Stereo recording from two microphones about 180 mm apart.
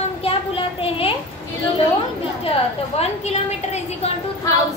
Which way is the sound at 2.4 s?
35° left (ahead or behind).